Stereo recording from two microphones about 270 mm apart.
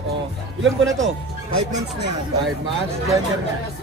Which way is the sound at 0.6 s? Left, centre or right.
Right.